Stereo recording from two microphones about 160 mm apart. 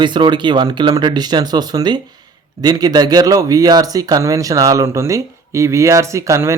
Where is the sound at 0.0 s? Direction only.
30° right (ahead or behind).